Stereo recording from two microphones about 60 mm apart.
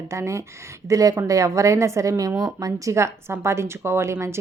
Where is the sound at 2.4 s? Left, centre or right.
Right.